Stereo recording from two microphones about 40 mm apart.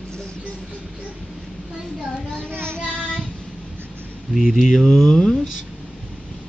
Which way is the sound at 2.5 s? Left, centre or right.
Right.